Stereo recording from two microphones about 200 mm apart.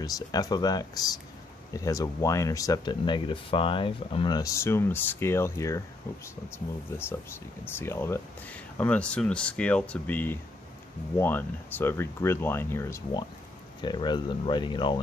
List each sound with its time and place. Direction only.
0.0 s speech: 20° left (ahead or behind)